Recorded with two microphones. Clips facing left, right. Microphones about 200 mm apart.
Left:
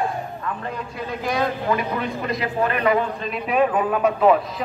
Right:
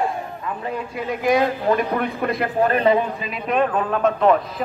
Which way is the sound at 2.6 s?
30° right (ahead or behind).